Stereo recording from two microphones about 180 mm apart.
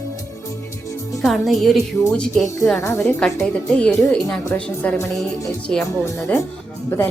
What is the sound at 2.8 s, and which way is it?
Speech, 15° left (ahead or behind).